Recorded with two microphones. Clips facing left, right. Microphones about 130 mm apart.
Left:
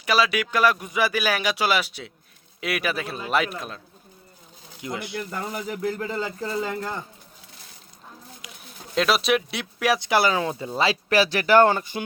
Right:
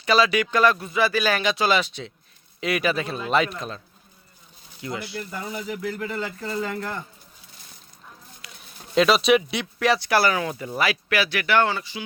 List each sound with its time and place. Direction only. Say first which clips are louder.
0.0 s speech: right 2 dB; 5° left (ahead or behind)
4.8 s speech: even; 20° left (ahead or behind)
5.3 s speech: right 1 dB; 50° left (ahead or behind); by 7.0 s 20° left (ahead or behind)
8.4 s a sound: left 2 dB; 15° left (ahead or behind)
9.0 s speech: right 4 dB; centre (ahead or behind)
10.0 s speech: even; 20° left (ahead or behind); by 12.0 s 50° left (ahead or behind)